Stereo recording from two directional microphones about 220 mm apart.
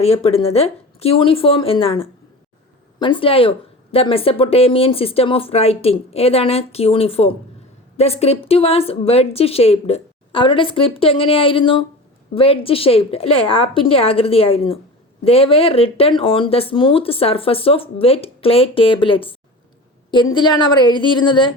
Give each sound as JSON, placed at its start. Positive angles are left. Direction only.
{"t": 0.0, "sound": "speech", "side_deg": 30}